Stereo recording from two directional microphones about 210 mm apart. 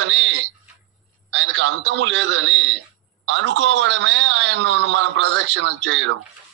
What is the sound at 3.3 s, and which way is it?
A man's voice, 60° right (ahead or behind).